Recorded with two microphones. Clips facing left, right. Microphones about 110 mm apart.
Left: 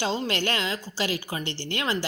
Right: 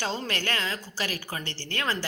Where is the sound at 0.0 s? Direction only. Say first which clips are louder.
Left 4 dB; 20° left (ahead or behind).